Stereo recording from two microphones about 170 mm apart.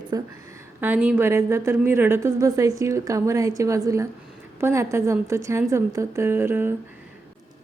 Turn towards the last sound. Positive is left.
turn(degrees=-15)  # may be behind; listen again after turning